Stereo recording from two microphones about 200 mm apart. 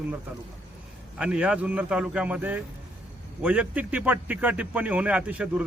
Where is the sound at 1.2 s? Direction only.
5° right (ahead or behind).